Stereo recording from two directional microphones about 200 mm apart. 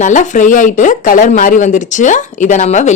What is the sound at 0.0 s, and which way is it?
A woman's voice, 40° left (ahead or behind).